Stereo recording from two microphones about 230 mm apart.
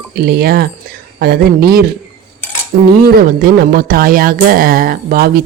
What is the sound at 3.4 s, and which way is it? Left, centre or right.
Speech, right.